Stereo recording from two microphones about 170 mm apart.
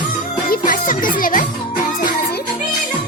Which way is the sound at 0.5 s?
55° left (ahead or behind).